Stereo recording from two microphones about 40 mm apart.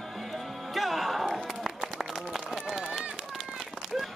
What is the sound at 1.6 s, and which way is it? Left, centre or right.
Run, centre.